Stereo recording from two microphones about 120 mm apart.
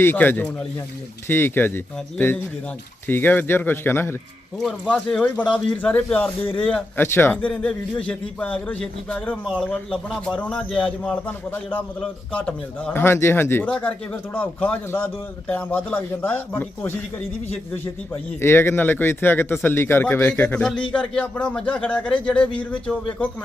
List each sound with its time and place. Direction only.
0.0 s a man's voice: 20° left (ahead or behind)
4.5 s a man's voice: 5° left (ahead or behind)
18.1 s a man's voice: 20° left (ahead or behind)